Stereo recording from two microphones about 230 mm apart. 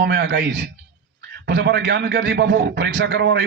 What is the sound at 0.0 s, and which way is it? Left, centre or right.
A man's voice, right.